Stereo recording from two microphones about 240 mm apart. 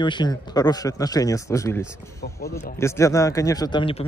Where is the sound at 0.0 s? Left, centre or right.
Centre.